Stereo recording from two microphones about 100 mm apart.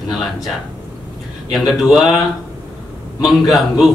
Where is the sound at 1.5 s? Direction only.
Centre (ahead or behind).